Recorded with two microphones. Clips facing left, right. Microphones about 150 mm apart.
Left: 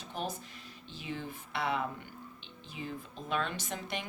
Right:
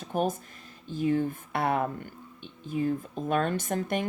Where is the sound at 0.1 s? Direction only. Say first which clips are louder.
Right 10 dB; 50° right (ahead or behind).